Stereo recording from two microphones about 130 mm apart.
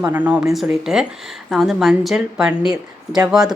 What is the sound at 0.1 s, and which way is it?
Speech, 10° right (ahead or behind).